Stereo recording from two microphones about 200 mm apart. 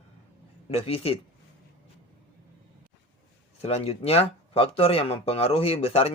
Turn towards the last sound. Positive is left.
turn(degrees=30)  # may be behind; listen again after turning